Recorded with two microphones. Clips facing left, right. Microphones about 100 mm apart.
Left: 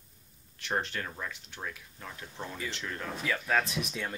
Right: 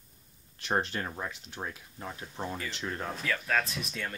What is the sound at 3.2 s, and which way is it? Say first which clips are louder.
Speech: left 2 dB; 10° left (ahead or behind).